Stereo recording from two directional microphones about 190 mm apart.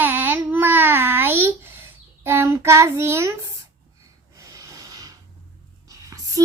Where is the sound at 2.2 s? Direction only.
15° right (ahead or behind).